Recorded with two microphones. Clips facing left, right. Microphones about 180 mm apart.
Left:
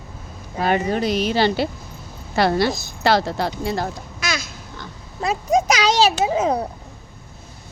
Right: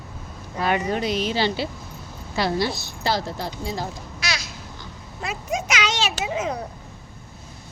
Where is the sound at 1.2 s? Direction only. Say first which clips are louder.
Left 5 dB; 55° left (ahead or behind).